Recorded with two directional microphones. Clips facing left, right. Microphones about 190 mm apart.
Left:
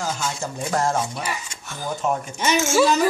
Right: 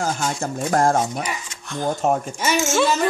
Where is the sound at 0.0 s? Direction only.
50° right (ahead or behind).